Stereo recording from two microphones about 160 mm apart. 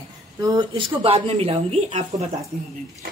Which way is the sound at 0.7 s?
35° right (ahead or behind).